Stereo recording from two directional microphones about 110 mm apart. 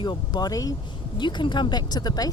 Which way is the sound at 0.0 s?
40° left (ahead or behind).